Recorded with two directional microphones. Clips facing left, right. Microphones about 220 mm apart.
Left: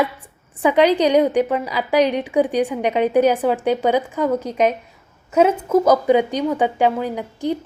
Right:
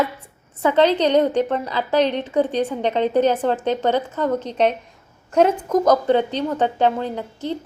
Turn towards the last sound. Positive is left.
turn(degrees=10)  # may be behind; listen again after turning